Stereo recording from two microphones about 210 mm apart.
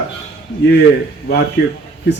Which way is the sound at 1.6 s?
55° left (ahead or behind).